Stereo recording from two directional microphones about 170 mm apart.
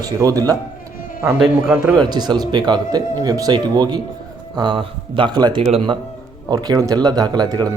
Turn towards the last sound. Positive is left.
turn(degrees=-25)  # may be behind; listen again after turning